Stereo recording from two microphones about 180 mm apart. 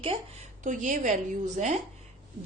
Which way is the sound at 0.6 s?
45° right (ahead or behind).